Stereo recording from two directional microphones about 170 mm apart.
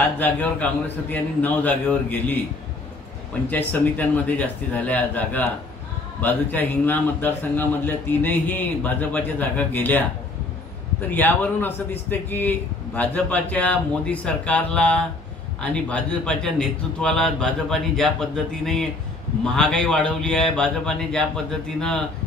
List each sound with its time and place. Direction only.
0.2 s a man's voice: 10° left (ahead or behind)
3.4 s a man's voice: 10° left (ahead or behind)
11.1 s a man's voice: 10° left (ahead or behind)